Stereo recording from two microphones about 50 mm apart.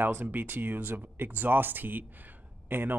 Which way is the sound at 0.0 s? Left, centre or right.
Right.